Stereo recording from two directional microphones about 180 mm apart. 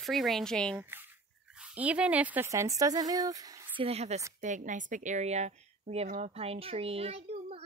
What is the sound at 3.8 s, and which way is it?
A woman's voice, 35° right (ahead or behind).